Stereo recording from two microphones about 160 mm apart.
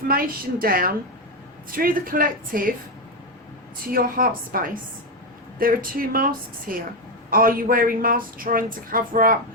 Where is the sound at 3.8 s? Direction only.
60° right (ahead or behind).